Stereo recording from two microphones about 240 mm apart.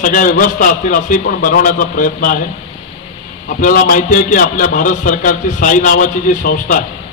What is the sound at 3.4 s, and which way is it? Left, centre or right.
A man's voice, left.